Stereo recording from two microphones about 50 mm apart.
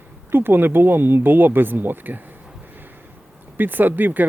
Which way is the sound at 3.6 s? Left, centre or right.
Right.